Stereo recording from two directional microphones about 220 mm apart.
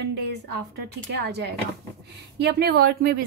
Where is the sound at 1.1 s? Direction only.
50° right (ahead or behind).